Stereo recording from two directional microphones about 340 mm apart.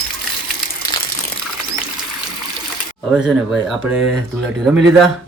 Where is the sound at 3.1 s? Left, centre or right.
Centre.